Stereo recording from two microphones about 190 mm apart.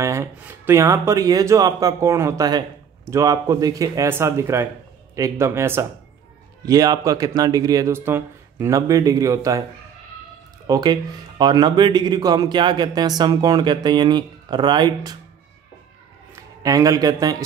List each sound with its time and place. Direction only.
0.0 s speech: 15° right (ahead or behind)
10.7 s speech: 20° right (ahead or behind)
16.3 s a man's voice: 20° right (ahead or behind)